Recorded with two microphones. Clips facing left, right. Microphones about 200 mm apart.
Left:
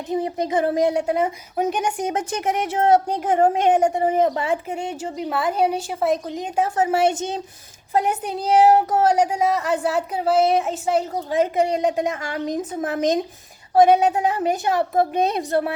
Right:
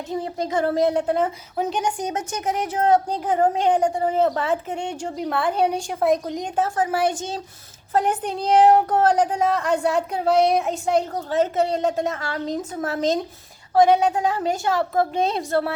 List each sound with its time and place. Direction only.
0.1 s a woman's voice: 20° left (ahead or behind); by 6.5 s centre (ahead or behind)
6.6 s a woman's voice: 25° left (ahead or behind)
7.9 s a woman's voice: 10° left (ahead or behind)